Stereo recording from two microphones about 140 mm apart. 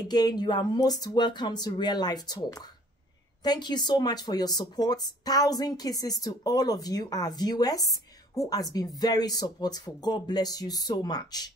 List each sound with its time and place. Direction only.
0.1 s speech: 30° left (ahead or behind)